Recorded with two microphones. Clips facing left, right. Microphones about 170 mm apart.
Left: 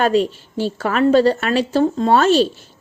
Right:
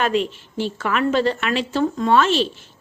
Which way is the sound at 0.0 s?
35° left (ahead or behind).